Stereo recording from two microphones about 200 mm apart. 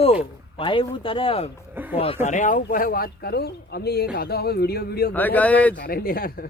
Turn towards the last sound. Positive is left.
turn(degrees=45)  # may be behind; listen again after turning